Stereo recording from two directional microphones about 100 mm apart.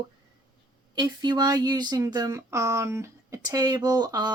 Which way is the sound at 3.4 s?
40° right (ahead or behind).